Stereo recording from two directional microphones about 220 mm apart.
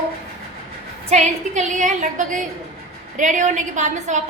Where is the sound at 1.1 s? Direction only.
30° right (ahead or behind).